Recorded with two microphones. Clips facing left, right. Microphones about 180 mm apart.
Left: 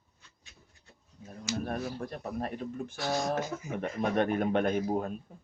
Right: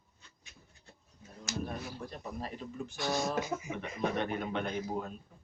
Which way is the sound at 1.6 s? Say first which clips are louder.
Left 5 dB; 60° left (ahead or behind).